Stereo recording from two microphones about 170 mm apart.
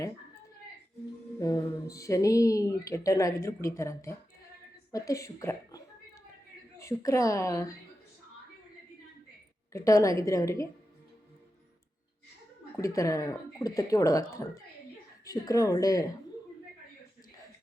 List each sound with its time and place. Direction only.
1.4 s a woman's voice: 20° left (ahead or behind)
9.7 s speech: 20° left (ahead or behind)
12.7 s speech: 20° left (ahead or behind)